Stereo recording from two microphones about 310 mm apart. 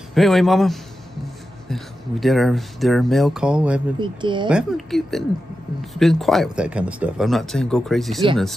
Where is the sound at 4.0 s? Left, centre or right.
Centre.